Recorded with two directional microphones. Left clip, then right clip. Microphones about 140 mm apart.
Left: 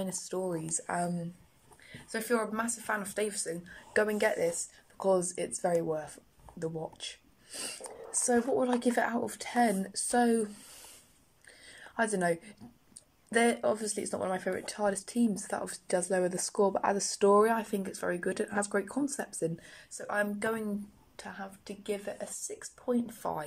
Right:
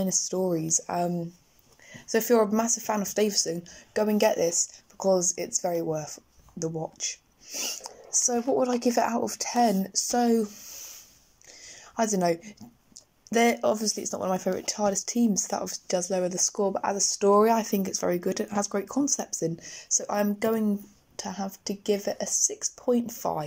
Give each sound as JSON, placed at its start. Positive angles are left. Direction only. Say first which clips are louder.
{"t": 0.0, "sound": "speech", "louder": "right 8 dB", "side_deg": -30}
{"t": 2.0, "sound": "speech", "louder": "right 9 dB", "side_deg": -45}
{"t": 11.7, "sound": "a woman's voice", "louder": "right 4 dB", "side_deg": -25}
{"t": 17.6, "sound": "speech", "louder": "right 7 dB", "side_deg": -35}
{"t": 18.4, "sound": "speech", "louder": "right 3 dB", "side_deg": -20}